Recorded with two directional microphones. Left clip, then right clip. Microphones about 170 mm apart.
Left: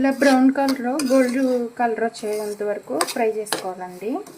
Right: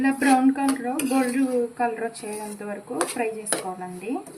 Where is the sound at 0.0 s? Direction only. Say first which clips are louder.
Left 3 dB; 60° left (ahead or behind).